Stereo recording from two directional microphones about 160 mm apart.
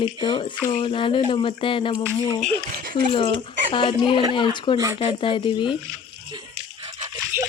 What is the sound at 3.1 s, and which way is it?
Speech, 30° left (ahead or behind).